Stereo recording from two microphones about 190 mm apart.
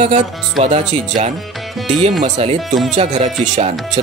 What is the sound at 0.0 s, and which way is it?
Speech, 35° right (ahead or behind).